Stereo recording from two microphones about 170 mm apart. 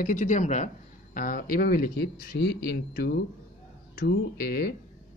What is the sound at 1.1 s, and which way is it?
Speech, 55° left (ahead or behind).